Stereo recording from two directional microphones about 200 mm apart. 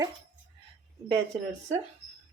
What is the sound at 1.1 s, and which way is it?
Speech, 20° right (ahead or behind).